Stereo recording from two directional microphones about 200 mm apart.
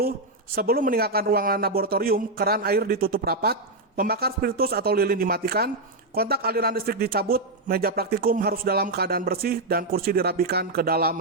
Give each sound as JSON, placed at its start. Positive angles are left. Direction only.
{"t": 0.5, "sound": "a man's voice", "side_deg": -50}